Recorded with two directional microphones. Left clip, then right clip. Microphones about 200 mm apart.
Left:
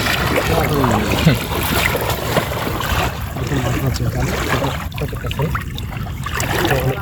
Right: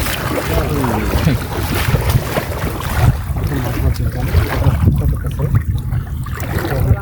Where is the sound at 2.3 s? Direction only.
20° left (ahead or behind); by 3.8 s 40° left (ahead or behind).